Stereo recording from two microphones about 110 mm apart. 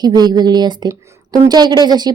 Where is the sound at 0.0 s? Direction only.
40° right (ahead or behind).